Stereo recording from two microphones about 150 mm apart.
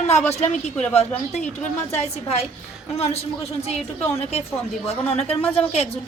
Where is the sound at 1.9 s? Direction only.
45° left (ahead or behind).